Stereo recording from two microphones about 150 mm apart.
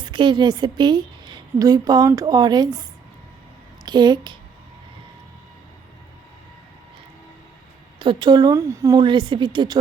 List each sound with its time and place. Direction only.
0.0 s a woman's voice: 30° right (ahead or behind)
3.8 s a woman's voice: 30° right (ahead or behind)
7.9 s a woman's voice: 30° right (ahead or behind)